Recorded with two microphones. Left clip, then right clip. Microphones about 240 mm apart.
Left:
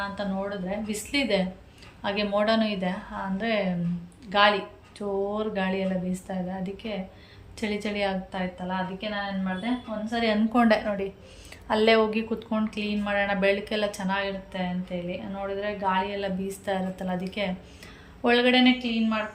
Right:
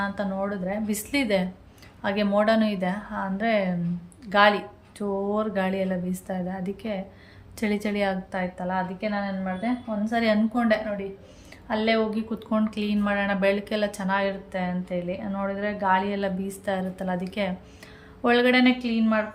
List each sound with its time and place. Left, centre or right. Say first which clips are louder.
0.2 s speech: right 2 dB; centre
10.5 s a woman's voice: left 2 dB; centre
12.4 s speech: right 3 dB; centre